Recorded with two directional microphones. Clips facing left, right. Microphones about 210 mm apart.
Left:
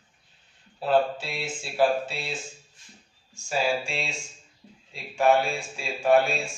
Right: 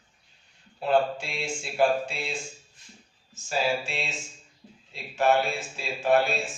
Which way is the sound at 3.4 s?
Centre (ahead or behind).